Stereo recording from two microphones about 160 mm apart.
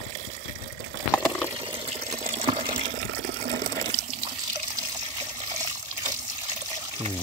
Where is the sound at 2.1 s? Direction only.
45° right (ahead or behind).